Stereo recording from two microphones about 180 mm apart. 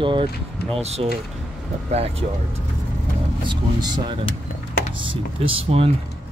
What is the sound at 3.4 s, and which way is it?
Speech, 25° right (ahead or behind).